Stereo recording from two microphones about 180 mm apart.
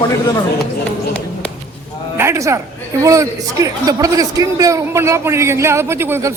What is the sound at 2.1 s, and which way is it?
A man's voice, 15° right (ahead or behind).